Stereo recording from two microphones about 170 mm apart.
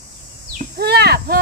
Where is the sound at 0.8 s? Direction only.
70° right (ahead or behind).